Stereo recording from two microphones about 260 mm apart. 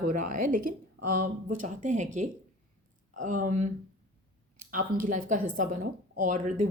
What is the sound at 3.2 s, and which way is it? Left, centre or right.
A woman's voice, right.